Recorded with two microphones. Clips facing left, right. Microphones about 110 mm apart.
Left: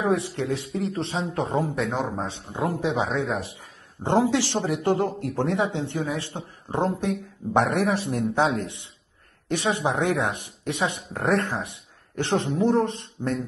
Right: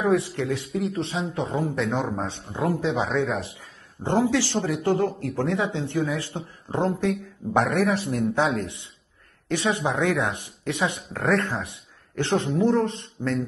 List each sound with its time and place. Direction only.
0.0 s speech: 30° left (ahead or behind)
1.8 s a man's voice: centre (ahead or behind)
3.4 s speech: 25° left (ahead or behind)